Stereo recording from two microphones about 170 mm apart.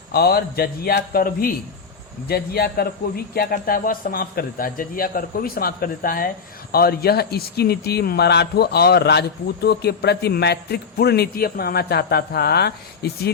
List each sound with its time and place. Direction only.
0.1 s a man's voice: 65° left (ahead or behind)